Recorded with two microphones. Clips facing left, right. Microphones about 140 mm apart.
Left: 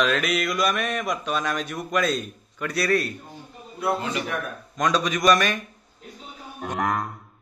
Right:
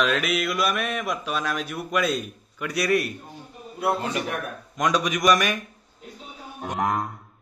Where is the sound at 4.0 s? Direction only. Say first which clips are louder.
Even; 50° right (ahead or behind).